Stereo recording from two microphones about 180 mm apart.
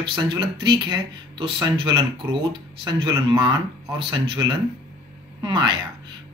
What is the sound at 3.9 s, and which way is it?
Speech, 30° right (ahead or behind).